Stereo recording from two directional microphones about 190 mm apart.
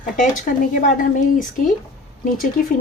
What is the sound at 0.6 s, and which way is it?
Speech, 45° left (ahead or behind).